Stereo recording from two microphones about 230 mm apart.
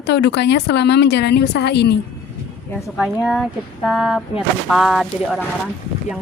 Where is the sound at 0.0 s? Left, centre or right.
Left.